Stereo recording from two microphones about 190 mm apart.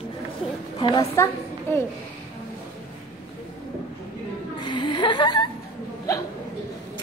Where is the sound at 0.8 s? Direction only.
15° left (ahead or behind).